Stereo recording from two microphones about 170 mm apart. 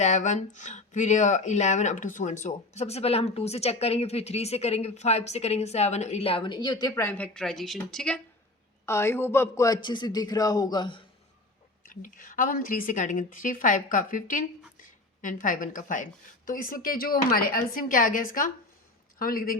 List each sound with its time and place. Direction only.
0.0 s speech: 45° left (ahead or behind); by 8.2 s 5° left (ahead or behind)
8.9 s a man's voice: 15° left (ahead or behind)
11.8 s a woman's voice: 50° left (ahead or behind)